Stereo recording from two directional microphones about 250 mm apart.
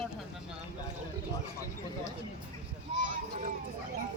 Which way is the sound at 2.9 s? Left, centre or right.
Right.